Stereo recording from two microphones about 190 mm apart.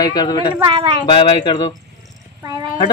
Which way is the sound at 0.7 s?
25° right (ahead or behind).